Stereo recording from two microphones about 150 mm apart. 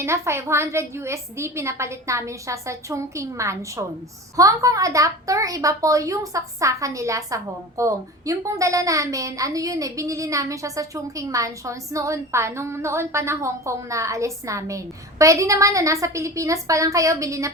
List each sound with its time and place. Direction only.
0.0 s a woman's voice: 15° right (ahead or behind)